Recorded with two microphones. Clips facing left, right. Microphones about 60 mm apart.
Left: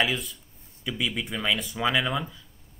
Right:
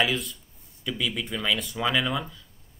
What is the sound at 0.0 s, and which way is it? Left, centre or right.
Speech, centre.